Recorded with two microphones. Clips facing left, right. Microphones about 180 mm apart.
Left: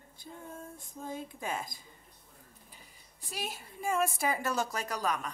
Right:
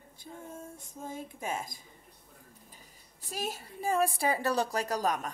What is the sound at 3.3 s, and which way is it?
Speech, 40° right (ahead or behind).